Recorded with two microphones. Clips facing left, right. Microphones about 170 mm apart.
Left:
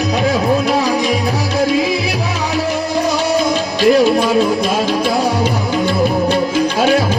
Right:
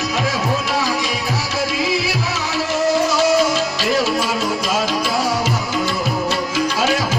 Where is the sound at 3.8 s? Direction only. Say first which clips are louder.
Left 12 dB; 55° left (ahead or behind).